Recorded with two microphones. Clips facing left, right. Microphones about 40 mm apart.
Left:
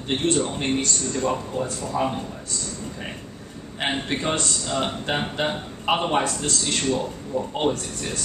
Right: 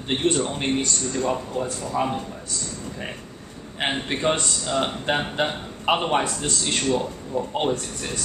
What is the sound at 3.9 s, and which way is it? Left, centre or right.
A man's voice, centre.